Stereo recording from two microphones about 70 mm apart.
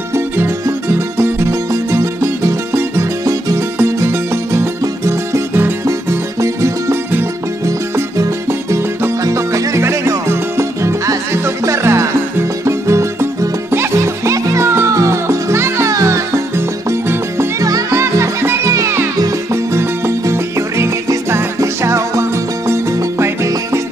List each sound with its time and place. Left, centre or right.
0.1 s music: right
17.6 s music: right
17.9 s music: right